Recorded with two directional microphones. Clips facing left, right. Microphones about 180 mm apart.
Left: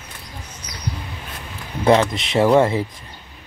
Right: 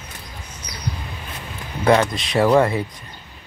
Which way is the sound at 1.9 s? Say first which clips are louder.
Left 1 dB; 25° left (ahead or behind).